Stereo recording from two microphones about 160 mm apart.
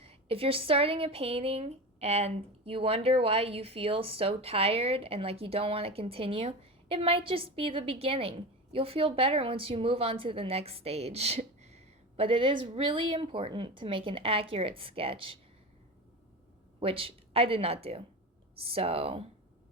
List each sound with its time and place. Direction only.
0.0 s speech: 35° right (ahead or behind)
16.8 s speech: 35° right (ahead or behind)